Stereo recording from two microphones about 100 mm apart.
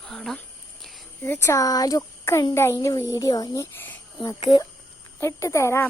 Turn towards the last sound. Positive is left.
turn(degrees=30)  # may be behind; listen again after turning